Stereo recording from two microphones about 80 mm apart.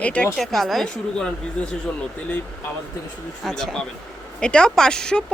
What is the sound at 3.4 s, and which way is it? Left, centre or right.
Speech, centre.